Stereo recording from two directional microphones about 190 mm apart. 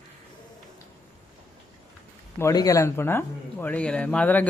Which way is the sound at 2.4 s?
20° left (ahead or behind).